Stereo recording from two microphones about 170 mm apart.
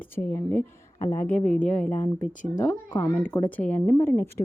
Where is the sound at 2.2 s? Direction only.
50° left (ahead or behind).